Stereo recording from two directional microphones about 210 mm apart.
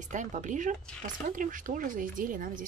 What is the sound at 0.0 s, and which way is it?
Speech, 35° right (ahead or behind).